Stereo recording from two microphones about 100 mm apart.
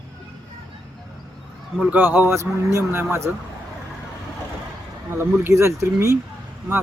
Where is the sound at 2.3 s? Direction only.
30° right (ahead or behind).